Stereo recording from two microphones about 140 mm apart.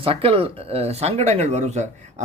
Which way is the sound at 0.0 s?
40° right (ahead or behind).